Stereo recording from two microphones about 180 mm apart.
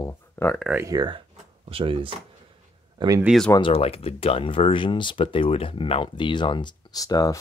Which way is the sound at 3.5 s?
25° left (ahead or behind).